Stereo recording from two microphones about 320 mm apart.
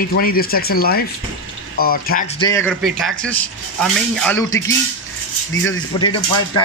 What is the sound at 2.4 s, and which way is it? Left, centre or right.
Speech, centre.